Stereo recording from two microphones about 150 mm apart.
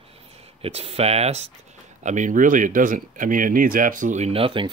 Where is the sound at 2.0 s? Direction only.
55° right (ahead or behind); by 4.7 s 35° right (ahead or behind).